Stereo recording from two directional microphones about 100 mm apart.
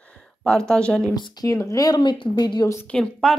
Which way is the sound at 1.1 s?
40° left (ahead or behind).